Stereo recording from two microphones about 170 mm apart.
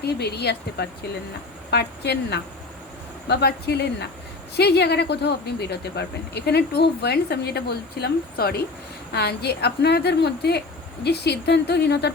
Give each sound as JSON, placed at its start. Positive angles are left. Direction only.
{"t": 0.0, "sound": "speech", "side_deg": 70}